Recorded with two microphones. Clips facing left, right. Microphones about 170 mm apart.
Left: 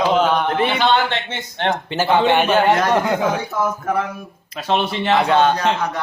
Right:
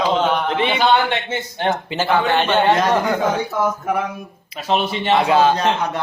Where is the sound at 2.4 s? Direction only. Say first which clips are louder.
Left 1 dB; 5° left (ahead or behind).